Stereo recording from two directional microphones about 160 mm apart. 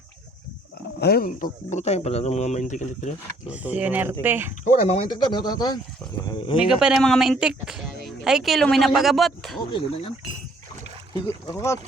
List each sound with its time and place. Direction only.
0.9 s speech: 75° left (ahead or behind); by 3.5 s 50° left (ahead or behind)
3.5 s speech: 10° right (ahead or behind)
4.6 s speech: 45° left (ahead or behind)
5.1 s speech: 25° left (ahead or behind)
6.7 s speech: 5° right (ahead or behind)
9.7 s speech: 35° left (ahead or behind)
11.1 s speech: 20° left (ahead or behind)